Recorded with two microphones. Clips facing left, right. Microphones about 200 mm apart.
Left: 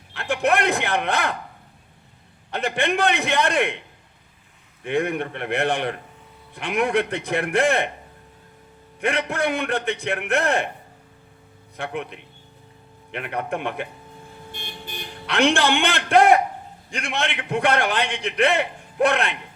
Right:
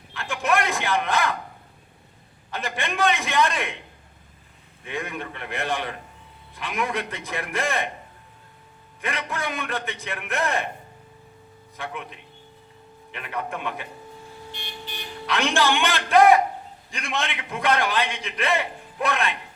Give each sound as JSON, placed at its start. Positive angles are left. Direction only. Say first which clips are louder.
{"t": 0.1, "sound": "a man's voice", "louder": "left 3 dB", "side_deg": 65}
{"t": 2.5, "sound": "a man's voice", "louder": "left 7 dB", "side_deg": 65}
{"t": 4.8, "sound": "a man's voice", "louder": "left 9 dB", "side_deg": 65}
{"t": 9.0, "sound": "a man's voice", "louder": "left 7 dB", "side_deg": 65}
{"t": 11.8, "sound": "a man's voice", "louder": "left 5 dB", "side_deg": 65}
{"t": 14.5, "sound": "vehicle", "louder": "left 2 dB", "side_deg": 50}
{"t": 16.9, "sound": "a man's voice", "louder": "left 2 dB", "side_deg": 70}